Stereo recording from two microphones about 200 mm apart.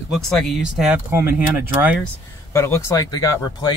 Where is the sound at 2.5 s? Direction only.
15° left (ahead or behind).